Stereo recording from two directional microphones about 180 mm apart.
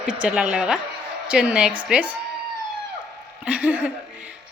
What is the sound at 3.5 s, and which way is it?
Speech, 5° right (ahead or behind).